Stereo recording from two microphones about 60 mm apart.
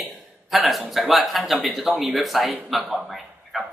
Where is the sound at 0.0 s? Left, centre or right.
Centre.